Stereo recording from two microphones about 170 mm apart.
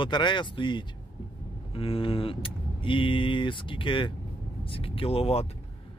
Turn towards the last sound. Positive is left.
turn(degrees=35)  # may be behind; listen again after turning